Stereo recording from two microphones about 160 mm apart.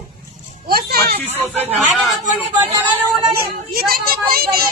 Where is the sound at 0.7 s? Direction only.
70° right (ahead or behind).